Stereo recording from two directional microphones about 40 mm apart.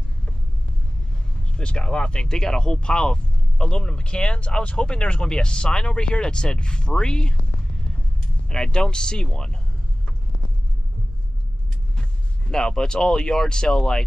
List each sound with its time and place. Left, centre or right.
1.6 s speech: left
8.5 s speech: centre
12.0 s speech: centre